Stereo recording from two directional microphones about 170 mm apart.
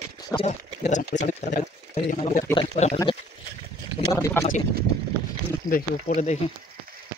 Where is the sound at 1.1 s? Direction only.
45° left (ahead or behind).